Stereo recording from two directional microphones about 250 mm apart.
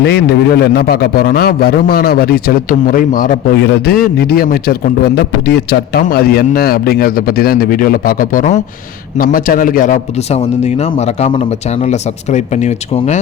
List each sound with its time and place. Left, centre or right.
0.0 s a man's voice: left